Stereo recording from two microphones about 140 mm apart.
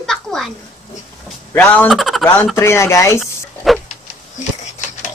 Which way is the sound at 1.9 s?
Centre (ahead or behind).